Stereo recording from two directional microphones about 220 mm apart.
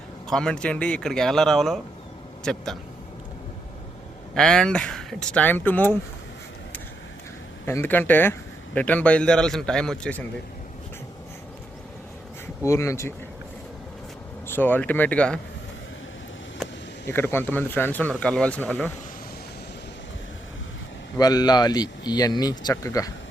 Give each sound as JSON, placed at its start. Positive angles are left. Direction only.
{"t": 0.3, "sound": "a man's voice", "side_deg": 5}
{"t": 4.4, "sound": "a man's voice", "side_deg": 5}
{"t": 7.6, "sound": "a man's voice", "side_deg": 10}
{"t": 12.6, "sound": "speech", "side_deg": 15}
{"t": 14.4, "sound": "speech", "side_deg": 10}
{"t": 16.6, "sound": "a sound", "side_deg": 0}
{"t": 17.1, "sound": "speech", "side_deg": 10}
{"t": 21.2, "sound": "speech", "side_deg": 15}